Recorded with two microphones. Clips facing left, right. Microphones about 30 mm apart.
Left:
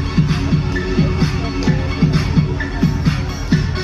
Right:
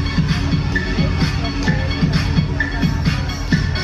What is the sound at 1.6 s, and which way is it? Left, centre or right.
Music, centre.